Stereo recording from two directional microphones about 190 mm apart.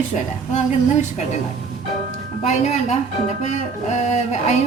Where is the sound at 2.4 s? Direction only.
35° left (ahead or behind).